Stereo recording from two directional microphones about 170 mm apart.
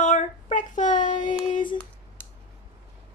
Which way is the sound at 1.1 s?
25° left (ahead or behind).